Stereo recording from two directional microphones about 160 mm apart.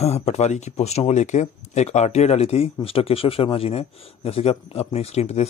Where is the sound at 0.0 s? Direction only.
40° left (ahead or behind).